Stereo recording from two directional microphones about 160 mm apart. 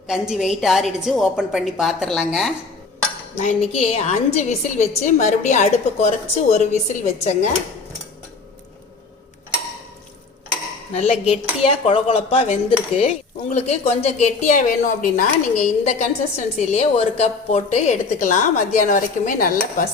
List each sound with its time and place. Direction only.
0.1 s a woman's voice: 5° right (ahead or behind)
3.3 s speech: 45° left (ahead or behind)
10.9 s dishes: 40° left (ahead or behind)
11.6 s a woman's voice: 40° left (ahead or behind); by 19.8 s 60° left (ahead or behind)